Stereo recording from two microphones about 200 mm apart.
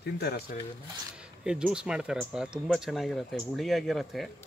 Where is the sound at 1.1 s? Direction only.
5° right (ahead or behind).